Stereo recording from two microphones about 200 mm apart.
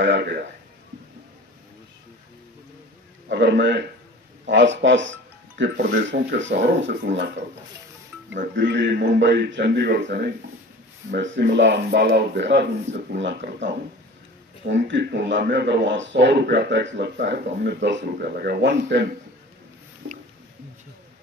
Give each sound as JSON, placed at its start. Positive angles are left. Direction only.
{"t": 0.0, "sound": "a man's voice", "side_deg": -55}
{"t": 3.3, "sound": "a man's voice", "side_deg": -60}
{"t": 8.5, "sound": "speech", "side_deg": -60}